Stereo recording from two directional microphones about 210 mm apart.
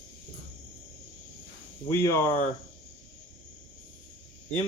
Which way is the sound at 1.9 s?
15° left (ahead or behind).